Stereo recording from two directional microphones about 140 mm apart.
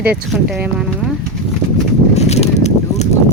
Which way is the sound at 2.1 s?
50° left (ahead or behind).